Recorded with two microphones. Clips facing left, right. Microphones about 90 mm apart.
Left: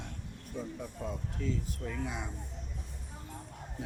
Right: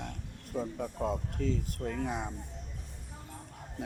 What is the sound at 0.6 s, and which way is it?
Speech, 60° right (ahead or behind).